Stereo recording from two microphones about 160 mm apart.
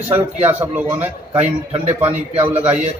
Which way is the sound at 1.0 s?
40° right (ahead or behind).